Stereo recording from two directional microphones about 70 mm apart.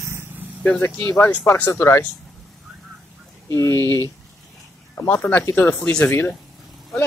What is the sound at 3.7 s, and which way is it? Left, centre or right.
Speech, right.